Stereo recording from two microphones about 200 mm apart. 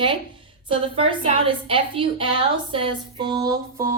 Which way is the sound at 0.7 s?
25° right (ahead or behind).